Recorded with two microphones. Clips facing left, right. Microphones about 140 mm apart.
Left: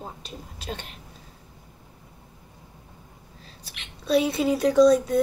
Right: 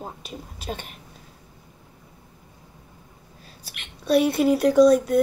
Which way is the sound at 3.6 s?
Centre (ahead or behind).